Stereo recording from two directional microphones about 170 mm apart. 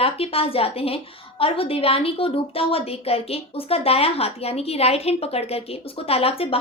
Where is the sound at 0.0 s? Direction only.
35° left (ahead or behind).